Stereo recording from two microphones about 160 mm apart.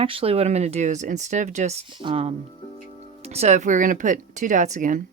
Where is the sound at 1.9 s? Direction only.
30° right (ahead or behind); by 5.0 s 55° right (ahead or behind).